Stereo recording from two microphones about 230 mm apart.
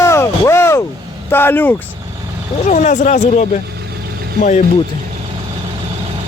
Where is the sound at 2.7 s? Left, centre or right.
Left.